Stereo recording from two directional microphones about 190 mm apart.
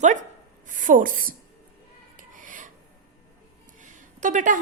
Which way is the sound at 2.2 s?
45° right (ahead or behind).